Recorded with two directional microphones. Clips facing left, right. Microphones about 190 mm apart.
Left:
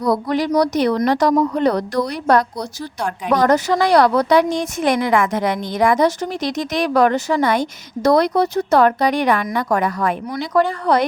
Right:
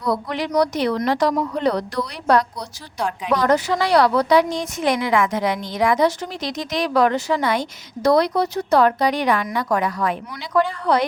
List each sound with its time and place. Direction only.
0.0 s a woman's voice: 40° left (ahead or behind)